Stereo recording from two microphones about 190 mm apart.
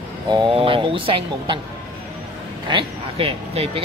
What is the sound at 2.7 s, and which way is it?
Speech, 25° right (ahead or behind).